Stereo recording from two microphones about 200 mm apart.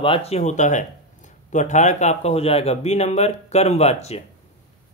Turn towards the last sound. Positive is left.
turn(degrees=30)  # may be behind; listen again after turning